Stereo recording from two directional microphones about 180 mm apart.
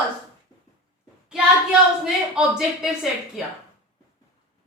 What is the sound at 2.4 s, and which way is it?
Speech, 5° right (ahead or behind).